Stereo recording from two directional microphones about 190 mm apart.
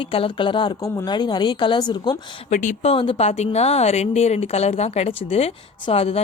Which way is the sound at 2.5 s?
40° left (ahead or behind).